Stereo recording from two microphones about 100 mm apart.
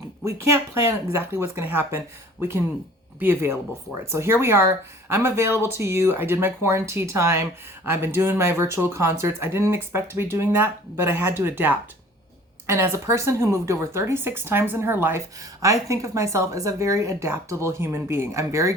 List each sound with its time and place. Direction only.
0.3 s speech: 30° right (ahead or behind)
15.4 s speech: 30° right (ahead or behind)